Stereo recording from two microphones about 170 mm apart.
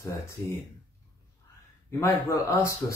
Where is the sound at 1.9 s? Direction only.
15° left (ahead or behind).